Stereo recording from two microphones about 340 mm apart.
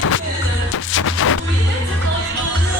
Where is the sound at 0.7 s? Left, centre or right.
Left.